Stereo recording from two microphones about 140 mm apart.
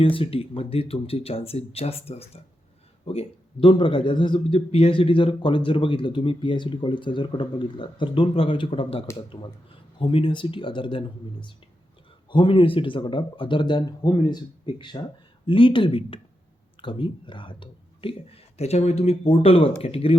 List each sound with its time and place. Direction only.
0.0 s a man's voice: 40° left (ahead or behind)
12.3 s a man's voice: 35° left (ahead or behind)